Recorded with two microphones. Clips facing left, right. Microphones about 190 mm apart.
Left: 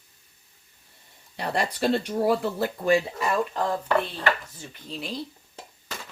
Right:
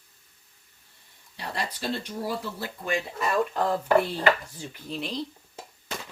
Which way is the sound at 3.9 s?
15° right (ahead or behind).